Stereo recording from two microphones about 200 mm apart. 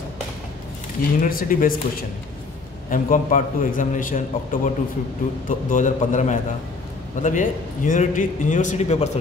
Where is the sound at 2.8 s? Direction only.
40° left (ahead or behind).